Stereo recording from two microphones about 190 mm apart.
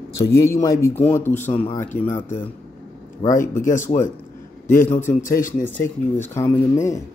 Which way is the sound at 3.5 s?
15° left (ahead or behind).